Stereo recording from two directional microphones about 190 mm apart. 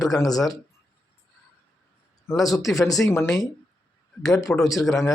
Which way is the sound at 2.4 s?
20° left (ahead or behind).